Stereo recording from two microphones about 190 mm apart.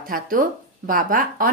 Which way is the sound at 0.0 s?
50° right (ahead or behind).